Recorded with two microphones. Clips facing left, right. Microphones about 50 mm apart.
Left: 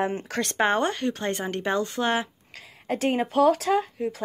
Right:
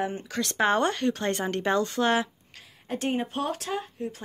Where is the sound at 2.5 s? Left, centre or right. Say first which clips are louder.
Left 5 dB; left.